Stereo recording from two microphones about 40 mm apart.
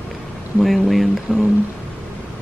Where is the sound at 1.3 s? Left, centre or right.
Right.